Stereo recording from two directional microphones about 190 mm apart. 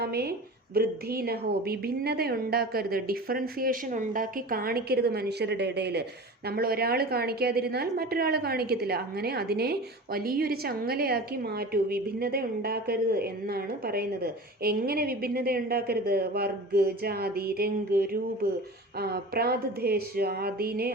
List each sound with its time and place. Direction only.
0.0 s a woman's voice: 55° right (ahead or behind)